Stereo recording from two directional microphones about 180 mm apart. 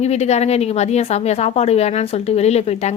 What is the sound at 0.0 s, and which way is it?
A woman's voice, 35° left (ahead or behind).